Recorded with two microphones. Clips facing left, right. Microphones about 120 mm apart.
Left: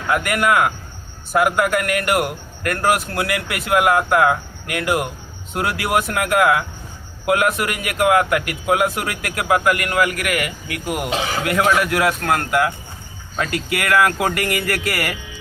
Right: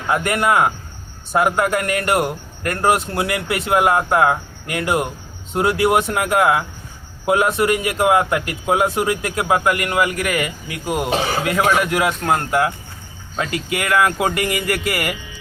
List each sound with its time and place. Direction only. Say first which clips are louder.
0.1 s a man's voice: even; 30° right (ahead or behind)